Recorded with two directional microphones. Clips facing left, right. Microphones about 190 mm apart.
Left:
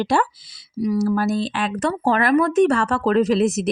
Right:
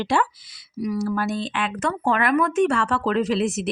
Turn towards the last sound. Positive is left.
turn(degrees=40)  # may be behind; listen again after turning